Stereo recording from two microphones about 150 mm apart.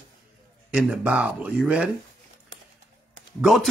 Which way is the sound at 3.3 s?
5° right (ahead or behind).